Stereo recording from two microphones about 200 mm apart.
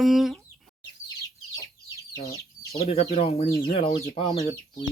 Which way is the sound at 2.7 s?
30° left (ahead or behind).